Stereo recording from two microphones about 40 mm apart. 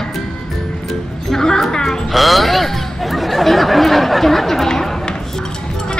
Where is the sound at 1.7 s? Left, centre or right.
Centre.